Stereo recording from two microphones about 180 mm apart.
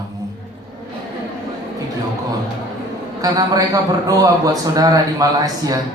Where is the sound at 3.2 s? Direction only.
20° right (ahead or behind).